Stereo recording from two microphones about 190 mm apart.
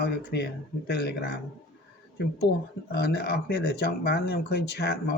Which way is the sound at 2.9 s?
60° left (ahead or behind).